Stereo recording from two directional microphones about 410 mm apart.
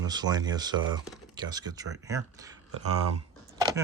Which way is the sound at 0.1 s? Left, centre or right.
Centre.